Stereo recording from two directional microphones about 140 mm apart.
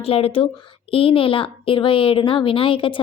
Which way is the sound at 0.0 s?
45° left (ahead or behind).